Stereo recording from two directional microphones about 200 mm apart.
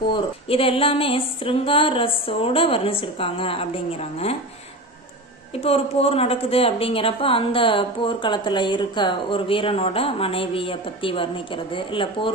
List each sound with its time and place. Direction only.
0.1 s a woman's voice: 25° left (ahead or behind)
5.6 s a woman's voice: 30° left (ahead or behind)